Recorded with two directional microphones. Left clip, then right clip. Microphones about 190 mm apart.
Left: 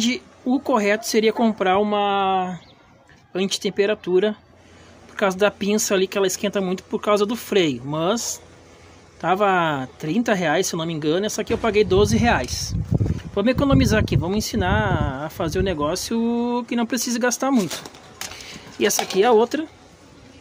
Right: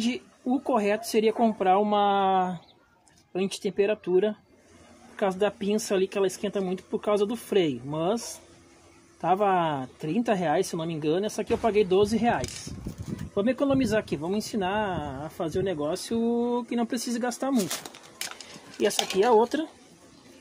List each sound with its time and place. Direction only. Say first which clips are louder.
0.0 s speech: left 7 dB; centre (ahead or behind)
1.9 s speech: left 3 dB; 15° right (ahead or behind)
3.3 s speech: left 5 dB; 5° left (ahead or behind)
9.2 s speech: left 5 dB; centre (ahead or behind)
19.1 s speech: left 5 dB; 10° left (ahead or behind)